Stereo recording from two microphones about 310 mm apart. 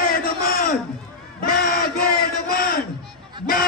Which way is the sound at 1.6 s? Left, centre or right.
Left.